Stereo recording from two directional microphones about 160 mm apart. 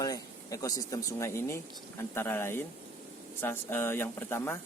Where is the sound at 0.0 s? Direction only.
20° left (ahead or behind).